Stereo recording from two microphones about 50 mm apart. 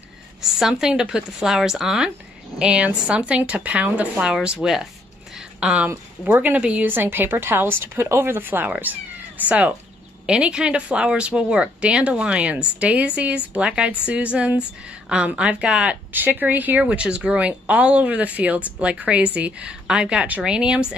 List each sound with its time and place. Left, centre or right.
0.4 s speech: centre
2.6 s speech: right
4.3 s speech: centre
6.2 s speech: right
6.9 s a woman's voice: right
10.2 s a woman's voice: centre
16.1 s speech: right; by 20.8 s centre